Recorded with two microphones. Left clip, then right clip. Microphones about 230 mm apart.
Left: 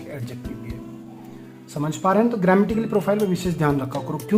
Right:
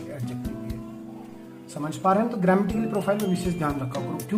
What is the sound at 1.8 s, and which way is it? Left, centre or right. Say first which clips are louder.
Speech: left 3 dB; left.